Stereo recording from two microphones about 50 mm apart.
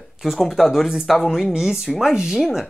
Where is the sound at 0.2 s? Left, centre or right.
Centre.